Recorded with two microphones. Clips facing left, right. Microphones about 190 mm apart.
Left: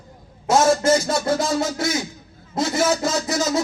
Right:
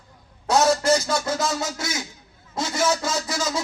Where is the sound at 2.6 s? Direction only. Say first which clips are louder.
Left 3 dB; 30° left (ahead or behind).